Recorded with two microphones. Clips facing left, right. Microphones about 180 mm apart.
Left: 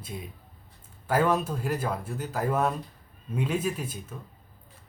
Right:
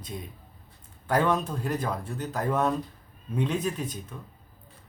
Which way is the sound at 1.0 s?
5° left (ahead or behind).